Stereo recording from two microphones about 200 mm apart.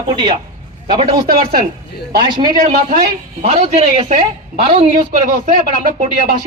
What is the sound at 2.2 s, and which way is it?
Speech, 25° right (ahead or behind).